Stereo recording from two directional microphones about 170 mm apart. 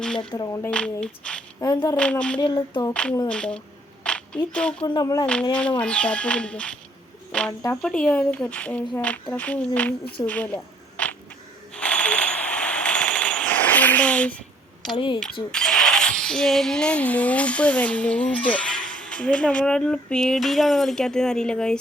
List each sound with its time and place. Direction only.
0.0 s a sound: 5° left (ahead or behind)
0.3 s speech: 20° left (ahead or behind)
0.7 s speech: 5° left (ahead or behind)
1.6 s speech: 25° left (ahead or behind)
2.0 s speech: 5° left (ahead or behind)
2.4 s speech: 25° left (ahead or behind)
2.9 s a woman's voice: 5° left (ahead or behind)
4.9 s speech: 20° left (ahead or behind)
5.2 s speech: 5° left (ahead or behind)
7.8 s speech: 5° left (ahead or behind)
10.2 s a sound: 5° left (ahead or behind)
11.7 s jackhammer: 5° left (ahead or behind)
14.9 s speech: 25° left (ahead or behind)
15.2 s speech: 5° left (ahead or behind)